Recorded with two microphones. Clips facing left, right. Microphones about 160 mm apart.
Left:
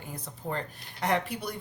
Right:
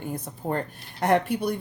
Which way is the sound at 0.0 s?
50° right (ahead or behind).